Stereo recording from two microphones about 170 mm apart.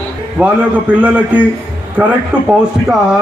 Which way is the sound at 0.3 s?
10° right (ahead or behind).